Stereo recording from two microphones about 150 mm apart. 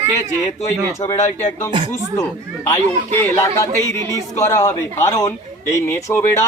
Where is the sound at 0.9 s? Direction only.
20° left (ahead or behind).